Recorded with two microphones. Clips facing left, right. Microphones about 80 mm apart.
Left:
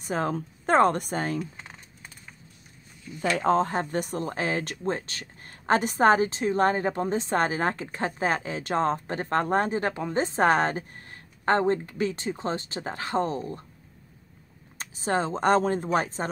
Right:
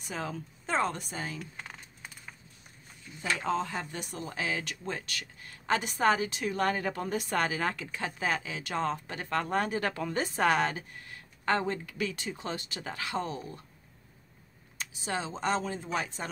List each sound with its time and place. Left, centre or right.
0.0 s speech: left
1.4 s a sound: centre
3.3 s speech: left
14.8 s speech: left